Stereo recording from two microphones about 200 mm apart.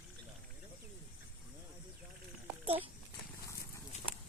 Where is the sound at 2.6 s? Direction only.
25° right (ahead or behind).